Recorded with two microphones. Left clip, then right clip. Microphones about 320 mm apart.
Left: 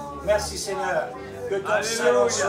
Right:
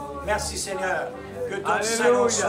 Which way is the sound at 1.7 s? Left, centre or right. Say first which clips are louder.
Right 1 dB; centre.